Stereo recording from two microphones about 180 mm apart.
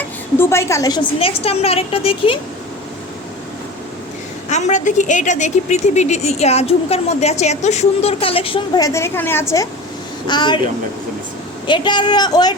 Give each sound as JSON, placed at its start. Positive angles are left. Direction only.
{"t": 0.3, "sound": "a woman's voice", "side_deg": 15}
{"t": 4.4, "sound": "a woman's voice", "side_deg": 40}
{"t": 8.9, "sound": "a woman's voice", "side_deg": 15}
{"t": 10.2, "sound": "a woman's voice", "side_deg": 25}
{"t": 11.6, "sound": "a woman's voice", "side_deg": 25}